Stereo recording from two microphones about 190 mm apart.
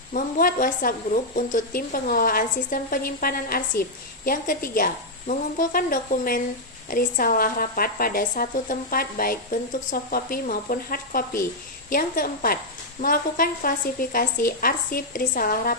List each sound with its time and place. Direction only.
0.1 s a woman's voice: 45° left (ahead or behind)